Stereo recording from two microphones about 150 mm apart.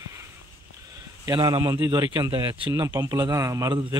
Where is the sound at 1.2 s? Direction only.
25° right (ahead or behind).